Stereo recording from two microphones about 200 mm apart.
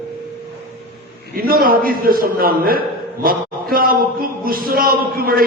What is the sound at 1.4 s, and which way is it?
A man's voice, 50° right (ahead or behind).